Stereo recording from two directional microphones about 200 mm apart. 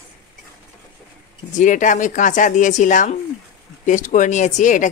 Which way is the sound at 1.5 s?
40° left (ahead or behind).